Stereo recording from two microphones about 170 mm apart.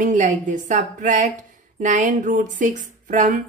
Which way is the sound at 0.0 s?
45° right (ahead or behind).